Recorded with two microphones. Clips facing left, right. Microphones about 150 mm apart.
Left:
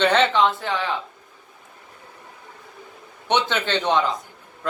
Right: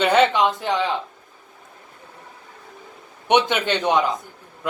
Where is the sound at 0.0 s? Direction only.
10° right (ahead or behind).